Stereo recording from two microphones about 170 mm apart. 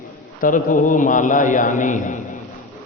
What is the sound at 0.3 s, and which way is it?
A man's voice, 50° left (ahead or behind).